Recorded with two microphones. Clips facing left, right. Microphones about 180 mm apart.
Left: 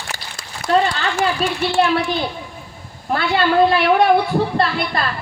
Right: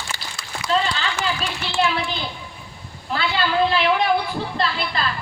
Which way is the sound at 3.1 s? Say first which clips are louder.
Left 5 dB; 55° left (ahead or behind).